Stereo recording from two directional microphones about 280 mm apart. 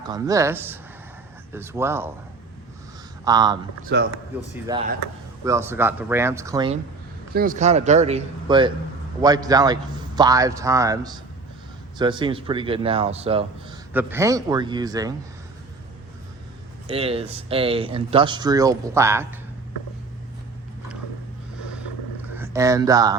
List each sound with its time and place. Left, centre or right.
0.0 s speech: centre
3.2 s speech: centre
3.9 s a man's voice: right
4.7 s speech: centre
7.3 s speech: right
13.9 s speech: centre
16.9 s speech: right
22.4 s speech: centre